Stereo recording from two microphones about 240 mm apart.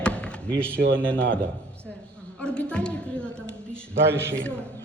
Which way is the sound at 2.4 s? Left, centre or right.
Centre.